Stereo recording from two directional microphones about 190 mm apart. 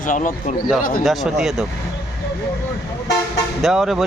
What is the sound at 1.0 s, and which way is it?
Speech, centre (ahead or behind).